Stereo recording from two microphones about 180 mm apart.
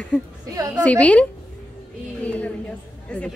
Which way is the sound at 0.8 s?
5° left (ahead or behind).